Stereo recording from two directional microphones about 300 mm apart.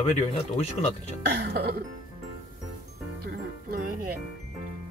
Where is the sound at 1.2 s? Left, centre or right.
Right.